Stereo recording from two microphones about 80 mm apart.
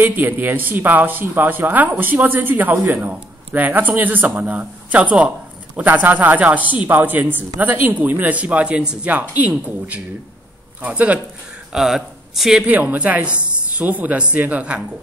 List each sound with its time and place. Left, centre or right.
0.0 s speech: right
11.7 s speech: centre
12.6 s speech: centre